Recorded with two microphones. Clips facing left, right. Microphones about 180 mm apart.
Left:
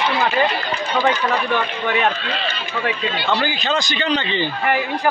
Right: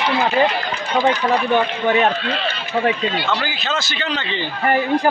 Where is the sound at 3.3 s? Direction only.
5° right (ahead or behind).